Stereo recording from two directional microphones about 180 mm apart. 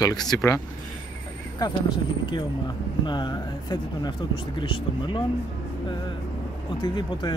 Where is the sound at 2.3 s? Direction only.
25° left (ahead or behind).